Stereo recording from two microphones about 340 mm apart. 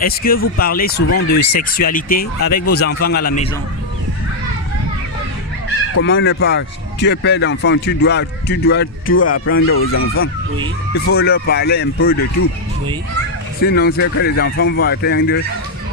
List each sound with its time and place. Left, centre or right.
0.0 s speech: left
5.9 s speech: left
13.6 s speech: left